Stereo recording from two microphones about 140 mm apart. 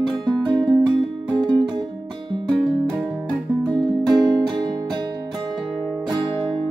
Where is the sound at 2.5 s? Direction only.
5° left (ahead or behind).